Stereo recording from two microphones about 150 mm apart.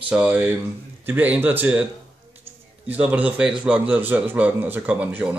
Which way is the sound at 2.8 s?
10° right (ahead or behind).